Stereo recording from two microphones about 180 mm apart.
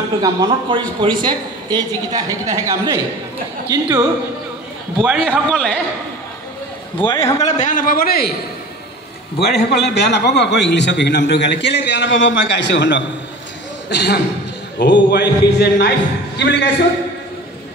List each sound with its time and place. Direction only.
0.2 s a man's voice: 25° right (ahead or behind)
5.0 s a man's voice: centre (ahead or behind)
7.0 s a man's voice: 30° left (ahead or behind)
7.3 s a man's voice: 40° left (ahead or behind); by 8.4 s 60° left (ahead or behind)
9.4 s a man's voice: 65° left (ahead or behind)
13.8 s a man's voice: 70° left (ahead or behind)